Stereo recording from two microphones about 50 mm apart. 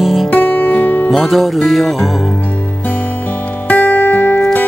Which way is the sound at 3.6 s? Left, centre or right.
Left.